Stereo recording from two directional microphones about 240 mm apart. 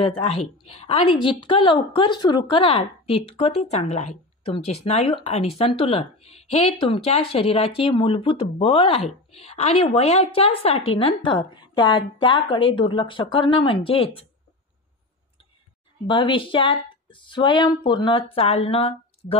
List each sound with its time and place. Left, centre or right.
0.0 s a woman's voice: left
16.1 s a woman's voice: left